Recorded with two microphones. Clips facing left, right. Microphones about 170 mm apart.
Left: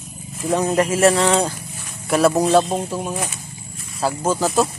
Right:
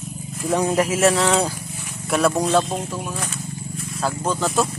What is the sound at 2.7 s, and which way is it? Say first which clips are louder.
Speech: left 4 dB; 20° left (ahead or behind).